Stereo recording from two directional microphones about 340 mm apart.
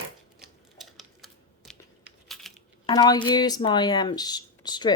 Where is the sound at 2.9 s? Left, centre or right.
Centre.